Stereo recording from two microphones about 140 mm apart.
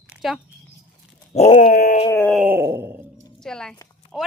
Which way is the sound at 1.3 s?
50° left (ahead or behind).